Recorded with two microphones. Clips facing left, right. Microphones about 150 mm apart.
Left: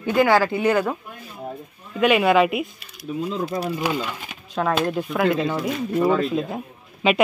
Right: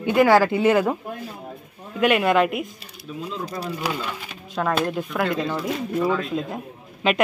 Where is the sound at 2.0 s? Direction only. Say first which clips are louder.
Left 2 dB; centre (ahead or behind).